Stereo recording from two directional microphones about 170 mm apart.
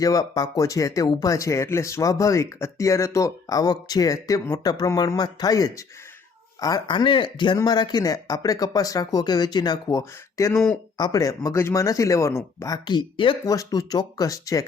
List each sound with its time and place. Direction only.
0.0 s speech: 20° left (ahead or behind)
10.5 s speech: centre (ahead or behind)
10.9 s speech: 20° left (ahead or behind)